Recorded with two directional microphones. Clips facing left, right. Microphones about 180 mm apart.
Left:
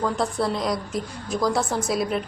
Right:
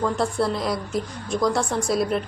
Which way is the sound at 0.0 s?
Centre (ahead or behind).